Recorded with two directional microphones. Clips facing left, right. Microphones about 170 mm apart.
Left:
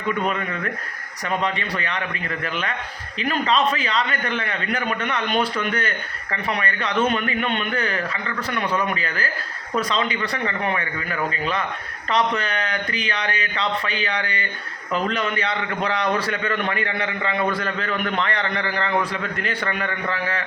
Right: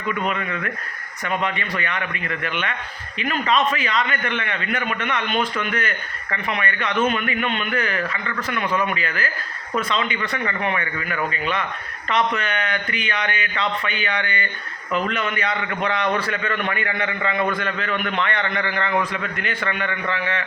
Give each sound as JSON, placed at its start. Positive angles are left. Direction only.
{"t": 1.5, "sound": "a man's voice", "side_deg": 35}